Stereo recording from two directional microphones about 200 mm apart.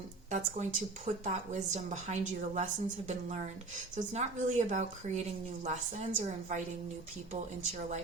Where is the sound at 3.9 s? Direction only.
35° right (ahead or behind).